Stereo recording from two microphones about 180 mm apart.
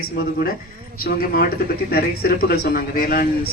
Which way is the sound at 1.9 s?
60° left (ahead or behind).